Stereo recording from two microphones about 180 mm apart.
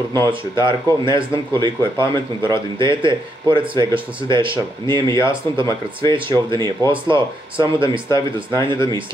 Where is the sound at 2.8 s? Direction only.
25° right (ahead or behind).